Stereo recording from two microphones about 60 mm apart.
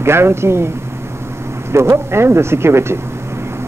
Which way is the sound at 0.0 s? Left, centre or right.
Right.